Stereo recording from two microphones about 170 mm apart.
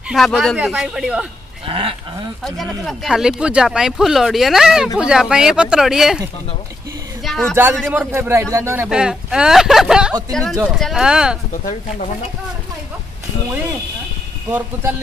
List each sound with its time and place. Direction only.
0.1 s speech: centre (ahead or behind)
1.7 s speech: 30° right (ahead or behind)
2.4 s speech: centre (ahead or behind)
7.2 s a man's voice: 5° left (ahead or behind)
8.1 s a man's voice: 15° right (ahead or behind)
8.8 s speech: 5° right (ahead or behind)